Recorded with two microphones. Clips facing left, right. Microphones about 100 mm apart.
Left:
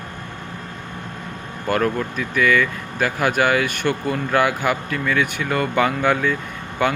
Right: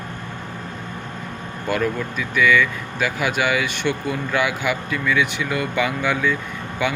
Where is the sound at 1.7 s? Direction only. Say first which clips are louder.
Left 2 dB; 40° left (ahead or behind).